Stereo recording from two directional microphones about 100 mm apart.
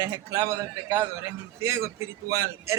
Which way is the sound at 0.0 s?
30° right (ahead or behind).